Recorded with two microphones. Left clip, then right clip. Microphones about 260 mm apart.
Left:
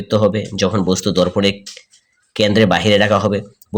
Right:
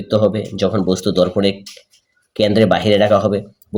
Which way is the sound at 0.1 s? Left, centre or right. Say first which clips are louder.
Even; left.